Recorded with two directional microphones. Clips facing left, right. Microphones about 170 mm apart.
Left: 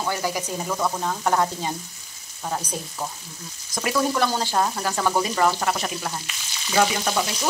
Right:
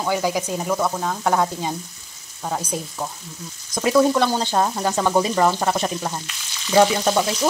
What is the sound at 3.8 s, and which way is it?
Speech, 20° right (ahead or behind).